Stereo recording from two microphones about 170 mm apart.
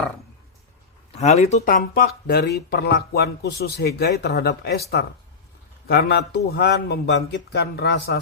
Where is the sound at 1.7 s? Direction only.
65° left (ahead or behind).